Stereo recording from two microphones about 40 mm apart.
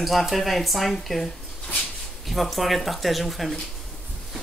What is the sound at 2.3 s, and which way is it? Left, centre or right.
Speech, centre.